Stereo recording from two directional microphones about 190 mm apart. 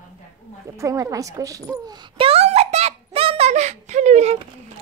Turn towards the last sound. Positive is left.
turn(degrees=-35)  # may be behind; listen again after turning